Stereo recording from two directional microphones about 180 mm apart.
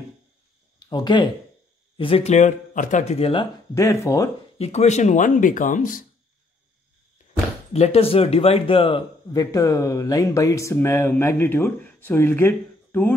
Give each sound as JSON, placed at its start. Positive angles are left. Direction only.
{"t": 0.7, "sound": "speech", "side_deg": 25}
{"t": 3.7, "sound": "speech", "side_deg": 15}
{"t": 4.6, "sound": "speech", "side_deg": 35}
{"t": 7.7, "sound": "speech", "side_deg": 35}